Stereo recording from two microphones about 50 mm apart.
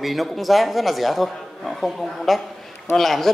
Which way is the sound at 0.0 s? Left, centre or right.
Centre.